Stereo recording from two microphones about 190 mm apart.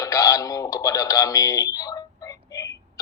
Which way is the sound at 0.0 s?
20° left (ahead or behind).